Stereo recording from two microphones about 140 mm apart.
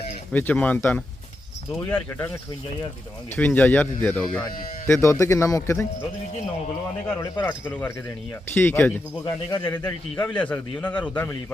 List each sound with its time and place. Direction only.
0.3 s a man's voice: 10° left (ahead or behind)
3.3 s a man's voice: 10° left (ahead or behind)
4.9 s a man's voice: 20° left (ahead or behind)
7.3 s a man's voice: 15° left (ahead or behind)
9.2 s a man's voice: 30° left (ahead or behind)
9.7 s a man's voice: 10° left (ahead or behind)